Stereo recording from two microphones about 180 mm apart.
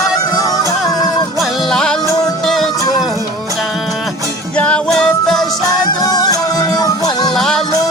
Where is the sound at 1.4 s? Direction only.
Centre (ahead or behind).